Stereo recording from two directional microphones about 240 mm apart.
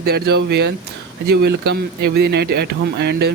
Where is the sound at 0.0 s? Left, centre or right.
Right.